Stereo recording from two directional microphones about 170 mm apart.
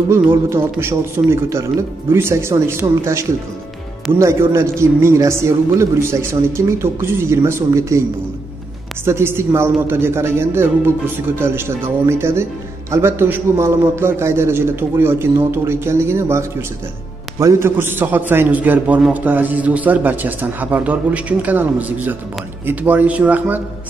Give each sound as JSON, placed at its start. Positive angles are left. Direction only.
{"t": 0.1, "sound": "a man's voice", "side_deg": -15}
{"t": 9.0, "sound": "a man's voice", "side_deg": -15}